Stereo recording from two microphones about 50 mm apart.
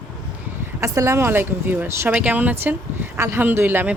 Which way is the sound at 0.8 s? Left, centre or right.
Right.